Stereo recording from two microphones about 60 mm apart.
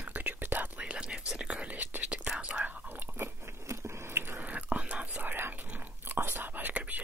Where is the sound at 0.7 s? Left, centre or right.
Centre.